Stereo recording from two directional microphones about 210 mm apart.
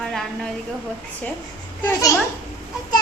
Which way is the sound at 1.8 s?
15° left (ahead or behind).